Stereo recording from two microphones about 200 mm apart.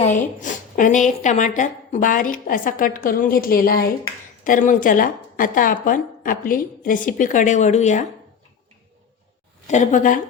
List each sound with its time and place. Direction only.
0.0 s a woman's voice: 35° left (ahead or behind)
9.6 s a woman's voice: 35° left (ahead or behind)